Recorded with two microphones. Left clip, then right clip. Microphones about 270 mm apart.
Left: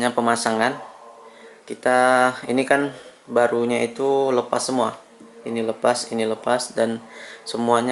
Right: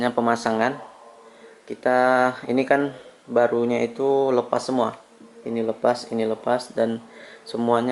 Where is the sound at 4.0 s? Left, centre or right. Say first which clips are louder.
Even; right.